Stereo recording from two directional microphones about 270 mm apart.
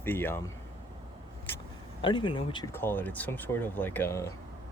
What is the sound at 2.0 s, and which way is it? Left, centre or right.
Speech, centre.